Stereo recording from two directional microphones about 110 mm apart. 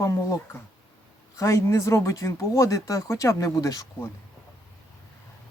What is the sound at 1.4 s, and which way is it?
Speech, 25° left (ahead or behind).